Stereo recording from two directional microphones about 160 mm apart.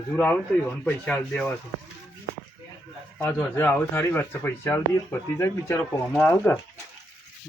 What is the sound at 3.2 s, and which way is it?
Speech, 15° left (ahead or behind).